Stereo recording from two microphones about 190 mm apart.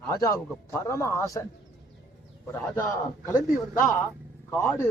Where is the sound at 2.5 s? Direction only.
10° left (ahead or behind).